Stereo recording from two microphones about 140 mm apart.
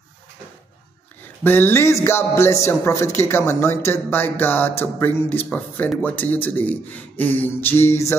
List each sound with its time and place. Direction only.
1.4 s speech: 15° left (ahead or behind)